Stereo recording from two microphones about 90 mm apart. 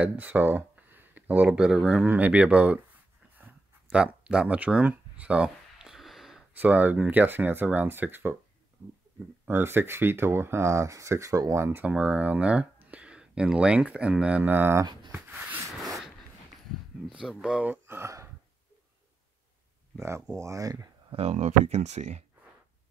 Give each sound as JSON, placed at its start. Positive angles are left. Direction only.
{"t": 0.0, "sound": "speech", "side_deg": -20}
{"t": 3.8, "sound": "a sound", "side_deg": -10}
{"t": 6.5, "sound": "speech", "side_deg": -20}
{"t": 9.5, "sound": "speech", "side_deg": -25}
{"t": 11.8, "sound": "speech", "side_deg": -15}
{"t": 15.1, "sound": "a sound", "side_deg": -15}
{"t": 17.1, "sound": "speech", "side_deg": -10}
{"t": 17.8, "sound": "a sound", "side_deg": -30}
{"t": 20.0, "sound": "speech", "side_deg": -30}